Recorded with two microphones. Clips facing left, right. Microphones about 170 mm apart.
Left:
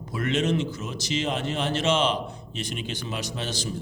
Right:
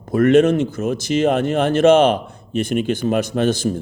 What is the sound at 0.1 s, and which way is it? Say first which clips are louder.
Speech: right 12 dB; 50° right (ahead or behind).